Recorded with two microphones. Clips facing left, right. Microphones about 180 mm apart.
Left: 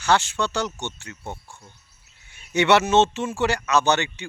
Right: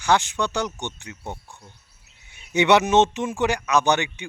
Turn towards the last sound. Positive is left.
turn(degrees=-15)  # may be behind; listen again after turning